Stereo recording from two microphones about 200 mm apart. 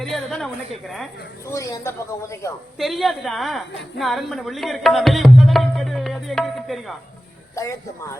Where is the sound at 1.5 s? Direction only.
15° left (ahead or behind).